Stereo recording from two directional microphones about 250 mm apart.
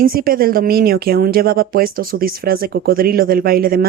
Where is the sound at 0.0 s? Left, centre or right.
Right.